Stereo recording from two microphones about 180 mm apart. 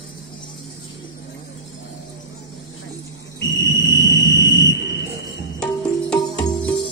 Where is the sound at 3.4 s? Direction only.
90° left.